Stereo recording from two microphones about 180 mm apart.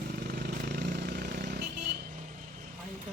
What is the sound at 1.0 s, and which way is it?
Vehicle, 65° right (ahead or behind).